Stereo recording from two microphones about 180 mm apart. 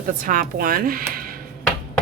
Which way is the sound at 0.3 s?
50° right (ahead or behind).